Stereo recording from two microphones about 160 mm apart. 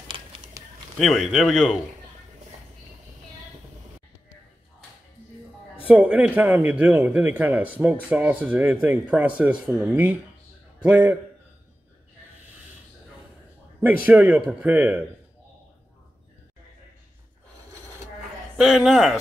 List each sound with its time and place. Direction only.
0.6 s a sound: 20° right (ahead or behind)
0.9 s speech: centre (ahead or behind)
5.9 s a man's voice: 5° right (ahead or behind)
14.0 s a man's voice: 10° right (ahead or behind)
18.6 s speech: 5° right (ahead or behind)